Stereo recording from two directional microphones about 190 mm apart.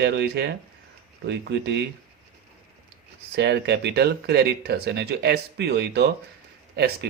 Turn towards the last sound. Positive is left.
turn(degrees=-60)  # may be behind; listen again after turning